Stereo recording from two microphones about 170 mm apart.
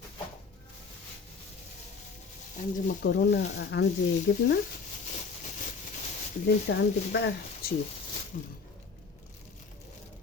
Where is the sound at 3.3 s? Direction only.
90° left.